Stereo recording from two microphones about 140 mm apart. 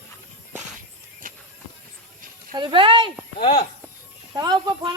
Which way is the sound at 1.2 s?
75° right (ahead or behind).